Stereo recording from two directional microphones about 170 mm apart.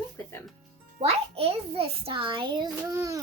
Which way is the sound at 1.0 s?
35° right (ahead or behind).